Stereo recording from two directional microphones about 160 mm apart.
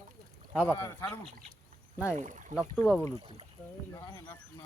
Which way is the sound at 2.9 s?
10° left (ahead or behind).